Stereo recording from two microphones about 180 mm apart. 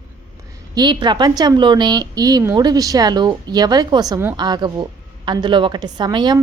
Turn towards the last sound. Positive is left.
turn(degrees=-25)  # may be behind; listen again after turning